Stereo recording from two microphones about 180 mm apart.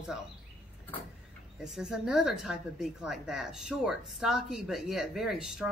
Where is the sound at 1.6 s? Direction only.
5° right (ahead or behind).